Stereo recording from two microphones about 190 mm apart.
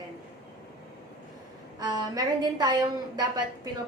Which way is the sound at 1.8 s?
20° right (ahead or behind).